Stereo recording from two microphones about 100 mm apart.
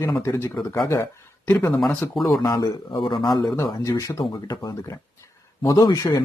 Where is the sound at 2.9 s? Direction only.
55° left (ahead or behind).